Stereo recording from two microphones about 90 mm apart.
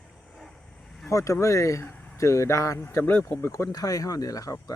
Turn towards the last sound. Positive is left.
turn(degrees=40)  # may be behind; listen again after turning